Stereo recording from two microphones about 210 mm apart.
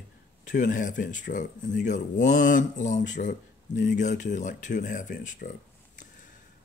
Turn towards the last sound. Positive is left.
turn(degrees=35)  # may be behind; listen again after turning